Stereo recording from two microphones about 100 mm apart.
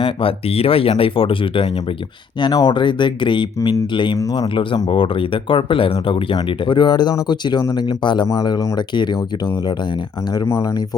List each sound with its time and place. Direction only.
0.0 s speech: 65° left (ahead or behind)
2.4 s speech: 45° left (ahead or behind)
10.3 s speech: 30° left (ahead or behind)